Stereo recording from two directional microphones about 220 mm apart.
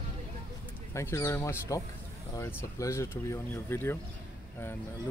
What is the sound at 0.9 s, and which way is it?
Speech, 10° left (ahead or behind).